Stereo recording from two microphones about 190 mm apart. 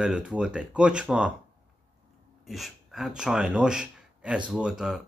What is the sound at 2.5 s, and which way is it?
Speech, centre (ahead or behind).